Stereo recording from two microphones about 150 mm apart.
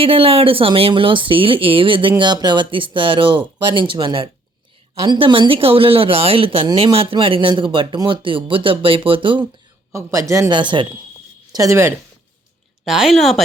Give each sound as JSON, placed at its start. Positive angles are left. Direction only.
{"t": 0.0, "sound": "speech", "side_deg": -40}
{"t": 9.9, "sound": "speech", "side_deg": -20}
{"t": 10.5, "sound": "speech", "side_deg": -30}
{"t": 11.5, "sound": "speech", "side_deg": -20}
{"t": 12.8, "sound": "a woman's voice", "side_deg": 0}